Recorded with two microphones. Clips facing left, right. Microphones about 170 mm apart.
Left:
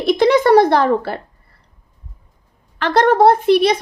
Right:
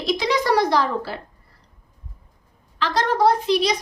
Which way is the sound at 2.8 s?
55° left (ahead or behind).